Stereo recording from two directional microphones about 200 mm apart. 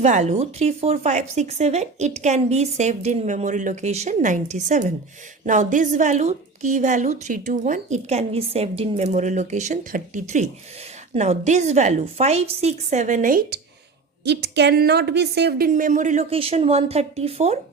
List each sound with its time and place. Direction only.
0.0 s a woman's voice: 35° right (ahead or behind)
14.3 s a woman's voice: 55° right (ahead or behind); by 17.6 s 30° right (ahead or behind)